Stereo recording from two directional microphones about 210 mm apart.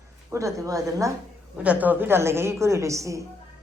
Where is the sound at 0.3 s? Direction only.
15° right (ahead or behind).